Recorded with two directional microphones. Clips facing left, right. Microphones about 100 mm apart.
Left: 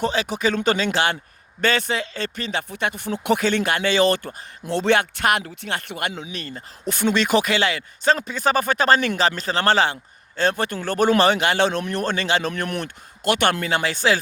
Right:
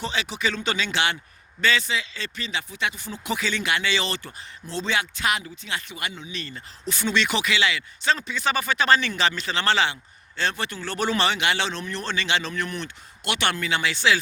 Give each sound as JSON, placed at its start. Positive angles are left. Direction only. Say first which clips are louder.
{"t": 0.0, "sound": "speech", "louder": "left 6 dB", "side_deg": 45}
{"t": 4.6, "sound": "speech", "louder": "left 8 dB", "side_deg": 60}
{"t": 6.8, "sound": "speech", "louder": "left 4 dB", "side_deg": 50}
{"t": 13.2, "sound": "speech", "louder": "left 6 dB", "side_deg": 45}